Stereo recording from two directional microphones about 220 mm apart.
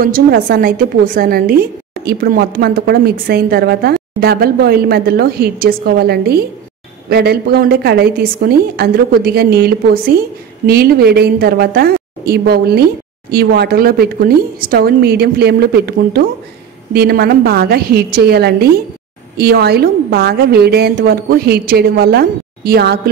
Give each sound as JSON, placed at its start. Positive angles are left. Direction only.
{"t": 0.0, "sound": "a woman's voice", "side_deg": -40}